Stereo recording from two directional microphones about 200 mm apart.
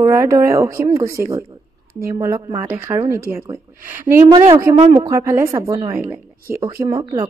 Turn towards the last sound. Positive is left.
turn(degrees=-25)  # may be behind; listen again after turning